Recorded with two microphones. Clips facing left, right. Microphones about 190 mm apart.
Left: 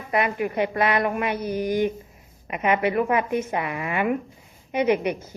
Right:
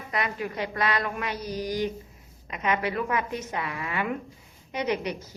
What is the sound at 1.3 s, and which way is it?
Mantra, 55° left (ahead or behind).